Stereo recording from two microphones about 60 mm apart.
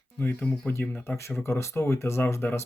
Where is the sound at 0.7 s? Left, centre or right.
Left.